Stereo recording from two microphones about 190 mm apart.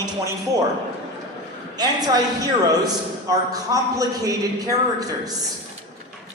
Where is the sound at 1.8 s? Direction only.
20° right (ahead or behind).